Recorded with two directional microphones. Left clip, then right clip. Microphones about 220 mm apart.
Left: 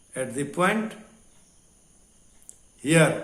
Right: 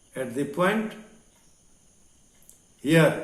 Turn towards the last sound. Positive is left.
turn(degrees=35)  # may be behind; listen again after turning